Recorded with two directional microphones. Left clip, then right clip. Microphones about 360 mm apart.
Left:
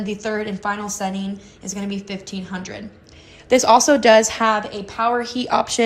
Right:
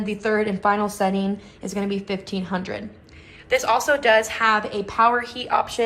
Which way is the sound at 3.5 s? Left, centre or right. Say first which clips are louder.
Left 6 dB; centre.